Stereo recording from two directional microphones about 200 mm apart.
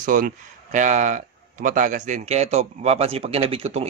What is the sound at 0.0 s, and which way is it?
A man's voice, 40° right (ahead or behind).